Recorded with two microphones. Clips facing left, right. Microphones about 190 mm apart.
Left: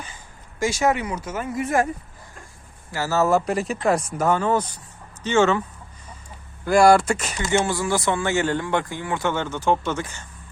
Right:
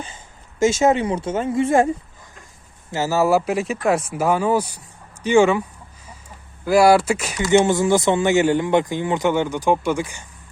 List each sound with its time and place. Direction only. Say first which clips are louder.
0.6 s speech: right 5 dB; 25° right (ahead or behind)
2.9 s speech: right 2 dB; 15° right (ahead or behind)
6.7 s speech: right 1 dB; 5° right (ahead or behind)
7.5 s speech: right 7 dB; 20° right (ahead or behind)